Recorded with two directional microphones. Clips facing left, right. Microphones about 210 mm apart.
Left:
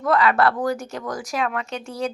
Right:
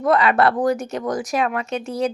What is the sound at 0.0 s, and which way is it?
Speech, 20° right (ahead or behind).